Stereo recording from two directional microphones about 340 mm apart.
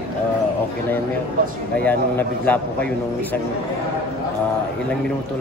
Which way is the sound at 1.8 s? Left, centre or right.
Centre.